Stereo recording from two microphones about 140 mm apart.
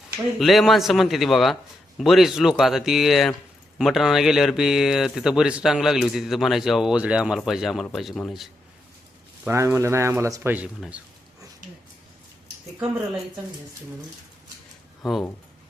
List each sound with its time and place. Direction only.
0.3 s speech: centre (ahead or behind)
9.5 s speech: 20° right (ahead or behind)
10.8 s speech: 5° right (ahead or behind)
15.0 s speech: 5° right (ahead or behind)